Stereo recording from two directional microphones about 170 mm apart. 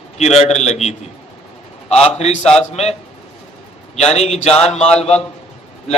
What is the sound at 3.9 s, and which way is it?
Speech, 40° left (ahead or behind).